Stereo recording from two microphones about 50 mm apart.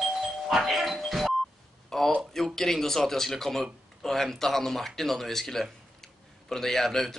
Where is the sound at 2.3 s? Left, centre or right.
Centre.